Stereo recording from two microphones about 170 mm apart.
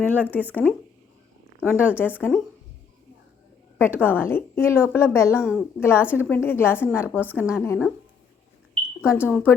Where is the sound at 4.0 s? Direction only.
10° left (ahead or behind).